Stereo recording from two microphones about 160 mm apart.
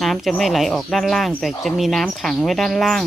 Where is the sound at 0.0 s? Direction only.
Centre (ahead or behind).